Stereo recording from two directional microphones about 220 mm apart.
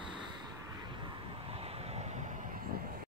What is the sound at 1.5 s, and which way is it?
Vehicle, 25° right (ahead or behind).